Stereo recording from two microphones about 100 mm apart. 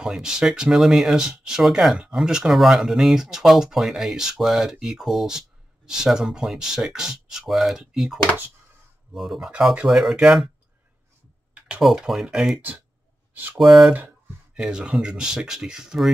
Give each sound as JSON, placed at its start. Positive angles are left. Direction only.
{"t": 0.0, "sound": "speech", "side_deg": -5}
{"t": 11.6, "sound": "speech", "side_deg": -5}
{"t": 13.6, "sound": "speech", "side_deg": -5}
{"t": 13.9, "sound": "a sound", "side_deg": -15}
{"t": 14.6, "sound": "speech", "side_deg": -10}